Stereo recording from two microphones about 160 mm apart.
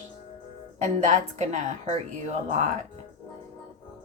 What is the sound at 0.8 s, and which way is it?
Speech, 50° right (ahead or behind).